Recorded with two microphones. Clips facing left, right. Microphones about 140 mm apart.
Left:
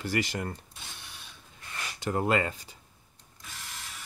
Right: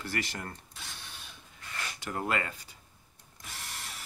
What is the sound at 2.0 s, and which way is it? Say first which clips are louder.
Speech: left 6 dB; 25° left (ahead or behind).